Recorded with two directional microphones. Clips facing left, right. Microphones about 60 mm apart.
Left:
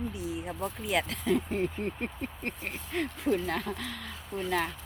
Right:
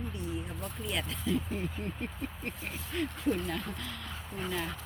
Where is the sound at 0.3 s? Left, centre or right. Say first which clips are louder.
Left 4 dB; left.